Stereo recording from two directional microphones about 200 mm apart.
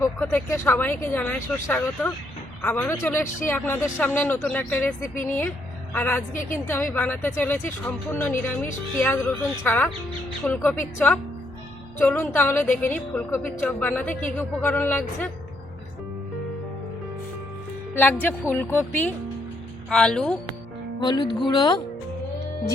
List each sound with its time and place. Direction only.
0.0 s a woman's voice: 10° left (ahead or behind)
17.9 s a woman's voice: 10° left (ahead or behind)
21.0 s speech: 20° left (ahead or behind)